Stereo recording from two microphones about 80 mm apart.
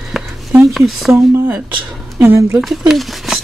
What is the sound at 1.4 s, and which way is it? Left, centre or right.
Speech, centre.